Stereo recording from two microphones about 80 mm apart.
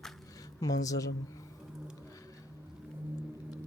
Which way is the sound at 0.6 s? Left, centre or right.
Left.